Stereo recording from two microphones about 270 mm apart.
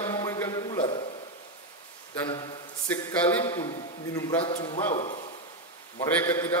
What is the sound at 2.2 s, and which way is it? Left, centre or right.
A man's voice, centre.